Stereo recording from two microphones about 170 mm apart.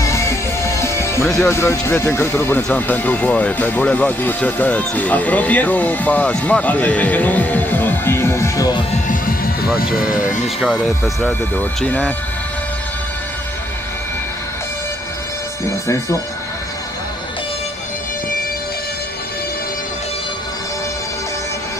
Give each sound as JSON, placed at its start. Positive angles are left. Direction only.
{"t": 0.0, "sound": "music", "side_deg": 15}
{"t": 1.2, "sound": "speech", "side_deg": 0}
{"t": 1.5, "sound": "speech", "side_deg": 15}
{"t": 9.0, "sound": "music", "side_deg": 55}
{"t": 9.8, "sound": "speech", "side_deg": -5}